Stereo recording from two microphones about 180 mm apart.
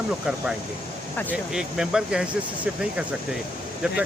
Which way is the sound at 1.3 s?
5° right (ahead or behind).